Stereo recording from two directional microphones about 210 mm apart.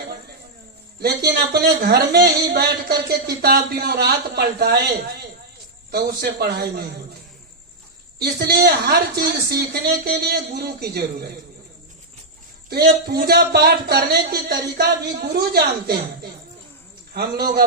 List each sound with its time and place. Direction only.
0.9 s a man's voice: 45° right (ahead or behind)
5.9 s a man's voice: 50° right (ahead or behind)
8.2 s a man's voice: 50° right (ahead or behind)
12.7 s a man's voice: 45° right (ahead or behind)
17.2 s a man's voice: 50° right (ahead or behind)